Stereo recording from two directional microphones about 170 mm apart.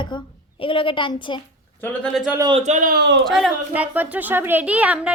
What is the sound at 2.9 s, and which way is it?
Speech, 85° right.